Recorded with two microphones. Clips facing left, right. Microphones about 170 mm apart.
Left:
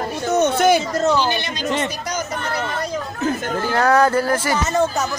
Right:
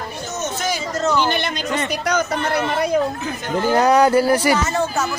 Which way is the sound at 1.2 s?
55° right (ahead or behind).